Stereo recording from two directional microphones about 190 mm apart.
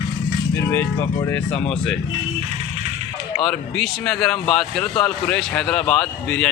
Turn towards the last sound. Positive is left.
turn(degrees=5)  # may be behind; listen again after turning